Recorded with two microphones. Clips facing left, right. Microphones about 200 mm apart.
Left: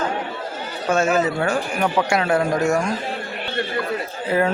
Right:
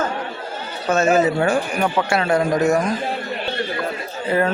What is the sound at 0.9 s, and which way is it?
A man's voice, 10° left (ahead or behind).